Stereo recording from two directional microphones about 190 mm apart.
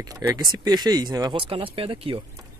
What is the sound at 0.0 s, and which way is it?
Speech, 20° right (ahead or behind).